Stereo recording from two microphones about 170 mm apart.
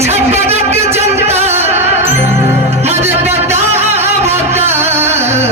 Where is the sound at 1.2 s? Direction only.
40° right (ahead or behind).